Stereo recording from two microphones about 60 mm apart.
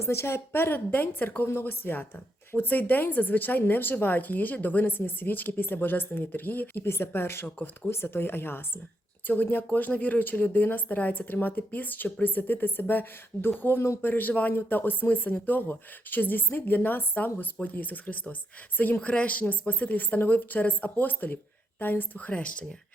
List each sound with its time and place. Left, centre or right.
0.0 s a woman's voice: left
1.5 s speech: left
14.0 s speech: left
22.3 s speech: centre